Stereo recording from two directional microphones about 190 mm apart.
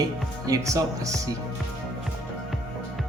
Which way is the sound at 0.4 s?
15° right (ahead or behind).